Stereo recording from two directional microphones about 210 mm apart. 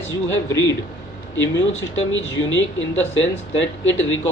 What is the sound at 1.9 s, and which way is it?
Speech, 65° left (ahead or behind).